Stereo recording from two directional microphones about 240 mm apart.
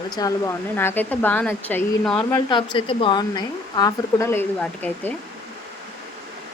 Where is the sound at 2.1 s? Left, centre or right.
Centre.